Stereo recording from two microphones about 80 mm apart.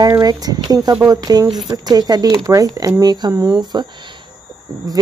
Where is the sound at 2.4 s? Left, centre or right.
Right.